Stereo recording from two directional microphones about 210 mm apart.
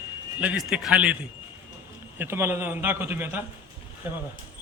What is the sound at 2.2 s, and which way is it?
A man's voice, 10° right (ahead or behind).